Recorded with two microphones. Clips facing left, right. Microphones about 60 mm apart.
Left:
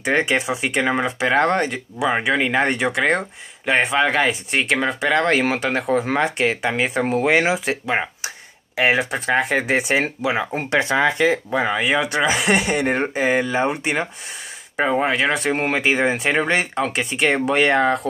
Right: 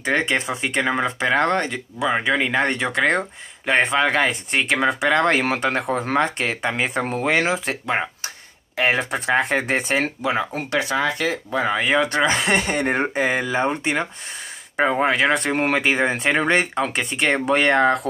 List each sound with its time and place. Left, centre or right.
0.0 s speech: centre
10.5 s speech: left
11.5 s speech: centre